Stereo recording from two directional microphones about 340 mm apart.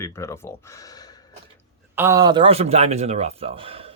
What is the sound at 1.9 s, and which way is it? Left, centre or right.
Speech, centre.